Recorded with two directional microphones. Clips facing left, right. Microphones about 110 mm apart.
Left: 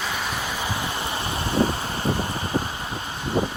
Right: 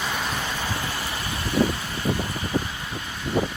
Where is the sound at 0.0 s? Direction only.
Centre (ahead or behind); by 2.0 s 30° left (ahead or behind).